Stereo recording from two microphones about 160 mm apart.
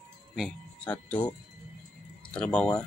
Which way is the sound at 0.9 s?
10° left (ahead or behind).